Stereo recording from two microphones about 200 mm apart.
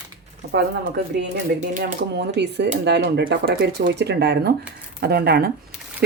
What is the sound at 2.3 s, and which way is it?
Speech, 60° right (ahead or behind).